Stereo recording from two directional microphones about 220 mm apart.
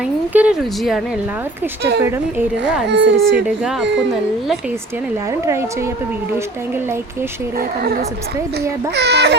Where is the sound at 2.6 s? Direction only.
55° right (ahead or behind).